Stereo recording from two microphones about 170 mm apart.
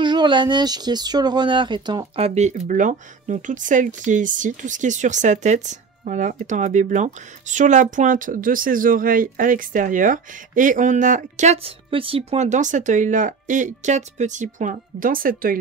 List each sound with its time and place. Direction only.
0.0 s speech: 25° right (ahead or behind); by 15.5 s 55° right (ahead or behind)